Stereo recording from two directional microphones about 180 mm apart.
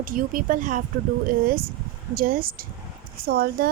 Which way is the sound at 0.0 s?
50° right (ahead or behind).